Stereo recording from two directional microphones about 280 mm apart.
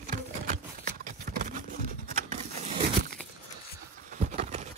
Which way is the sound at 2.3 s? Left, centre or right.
Right.